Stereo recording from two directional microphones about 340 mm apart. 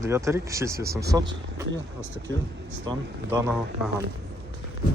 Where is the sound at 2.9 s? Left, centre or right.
Centre.